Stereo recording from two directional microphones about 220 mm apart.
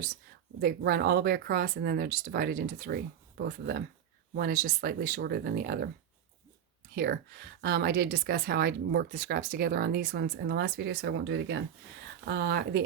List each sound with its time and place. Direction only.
0.6 s speech: 45° right (ahead or behind)
6.9 s speech: 45° right (ahead or behind)